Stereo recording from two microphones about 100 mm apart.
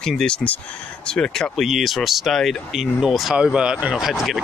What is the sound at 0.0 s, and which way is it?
Speech, 5° left (ahead or behind).